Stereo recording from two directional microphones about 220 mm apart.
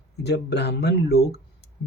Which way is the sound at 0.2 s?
50° left (ahead or behind).